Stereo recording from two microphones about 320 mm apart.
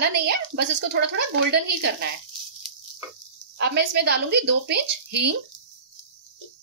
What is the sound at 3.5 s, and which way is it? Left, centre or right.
A woman's voice, right.